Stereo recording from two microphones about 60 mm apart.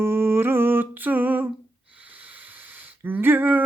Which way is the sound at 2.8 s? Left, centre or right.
Right.